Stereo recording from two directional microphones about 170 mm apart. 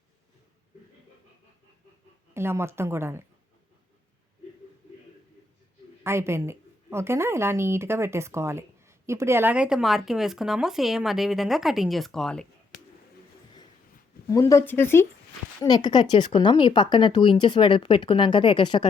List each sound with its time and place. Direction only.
2.3 s a woman's voice: 15° right (ahead or behind)
6.0 s a woman's voice: 15° right (ahead or behind); by 12.5 s 5° left (ahead or behind)
14.3 s speech: 20° left (ahead or behind)